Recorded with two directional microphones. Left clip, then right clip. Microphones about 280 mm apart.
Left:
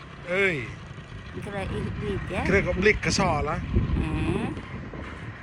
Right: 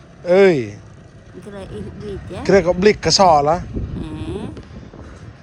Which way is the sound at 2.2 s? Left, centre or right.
Centre.